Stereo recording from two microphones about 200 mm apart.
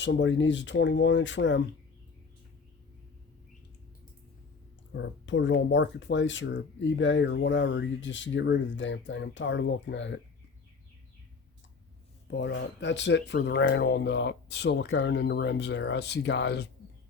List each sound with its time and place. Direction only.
0.0 s speech: 65° left (ahead or behind)
4.9 s speech: 65° left (ahead or behind)
12.3 s speech: 60° left (ahead or behind)